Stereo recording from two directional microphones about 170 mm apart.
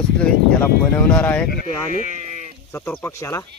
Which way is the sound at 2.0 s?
45° right (ahead or behind).